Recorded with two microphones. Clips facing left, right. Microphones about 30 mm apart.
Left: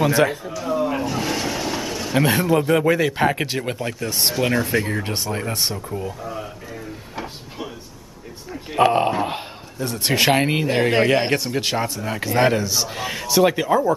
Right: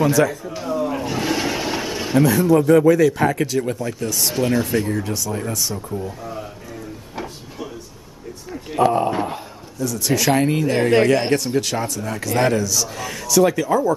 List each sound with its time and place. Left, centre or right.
0.1 s speech: left
0.7 s roaring cats: centre
1.0 s a sound: centre
2.2 s speech: left
8.7 s speech: left
10.7 s speech: centre
11.3 s speech: left
12.6 s speech: left